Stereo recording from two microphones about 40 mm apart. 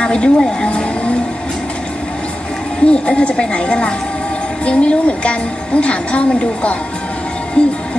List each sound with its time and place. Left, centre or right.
0.0 s speech: left
2.9 s a woman's voice: left